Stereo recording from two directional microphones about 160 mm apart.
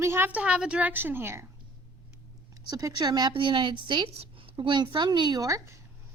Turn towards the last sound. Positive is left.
turn(degrees=-20)  # may be behind; listen again after turning